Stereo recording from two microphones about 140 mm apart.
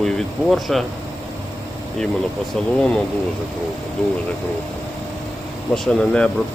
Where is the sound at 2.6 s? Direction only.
5° left (ahead or behind).